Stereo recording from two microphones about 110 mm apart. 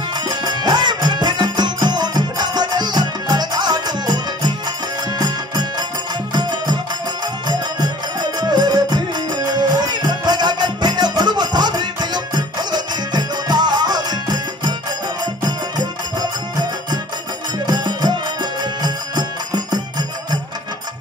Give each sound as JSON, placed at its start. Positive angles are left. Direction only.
{"t": 0.1, "sound": "music", "side_deg": -40}
{"t": 17.6, "sound": "music", "side_deg": -40}